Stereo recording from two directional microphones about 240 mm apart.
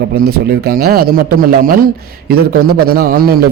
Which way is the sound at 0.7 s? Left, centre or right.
Right.